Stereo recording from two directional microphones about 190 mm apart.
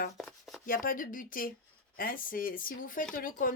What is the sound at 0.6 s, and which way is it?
Speech, 45° left (ahead or behind).